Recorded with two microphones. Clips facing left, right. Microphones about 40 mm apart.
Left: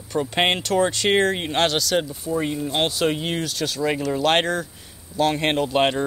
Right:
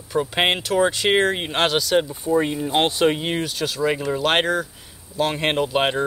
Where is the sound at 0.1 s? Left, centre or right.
Centre.